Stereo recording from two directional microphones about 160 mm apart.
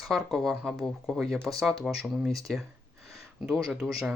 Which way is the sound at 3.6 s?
Centre (ahead or behind).